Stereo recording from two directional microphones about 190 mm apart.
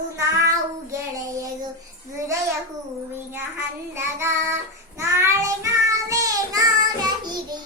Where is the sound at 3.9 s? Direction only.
15° right (ahead or behind).